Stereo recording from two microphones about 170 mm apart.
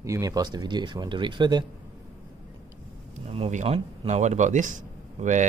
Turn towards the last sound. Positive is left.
turn(degrees=-45)  # may be behind; listen again after turning